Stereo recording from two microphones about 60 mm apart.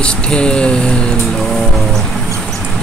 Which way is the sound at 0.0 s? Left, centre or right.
Centre.